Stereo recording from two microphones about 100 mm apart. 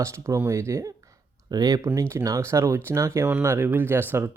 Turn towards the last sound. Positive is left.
turn(degrees=-20)  # may be behind; listen again after turning